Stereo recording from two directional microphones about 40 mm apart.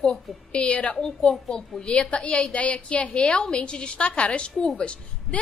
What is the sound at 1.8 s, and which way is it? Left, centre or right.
A woman's voice, left.